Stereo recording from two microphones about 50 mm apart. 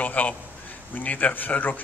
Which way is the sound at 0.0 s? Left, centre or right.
Left.